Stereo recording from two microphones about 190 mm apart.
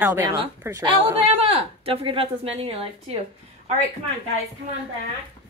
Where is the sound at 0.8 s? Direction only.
25° right (ahead or behind).